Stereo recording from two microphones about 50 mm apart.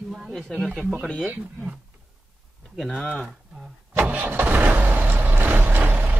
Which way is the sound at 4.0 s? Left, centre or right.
Right.